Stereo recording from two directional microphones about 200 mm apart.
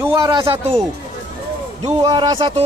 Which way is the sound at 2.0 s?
20° right (ahead or behind).